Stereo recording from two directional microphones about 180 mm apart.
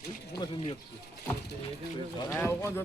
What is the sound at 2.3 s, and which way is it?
Speech, 15° left (ahead or behind).